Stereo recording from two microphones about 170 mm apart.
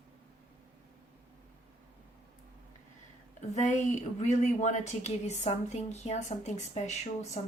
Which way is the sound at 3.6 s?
45° left (ahead or behind).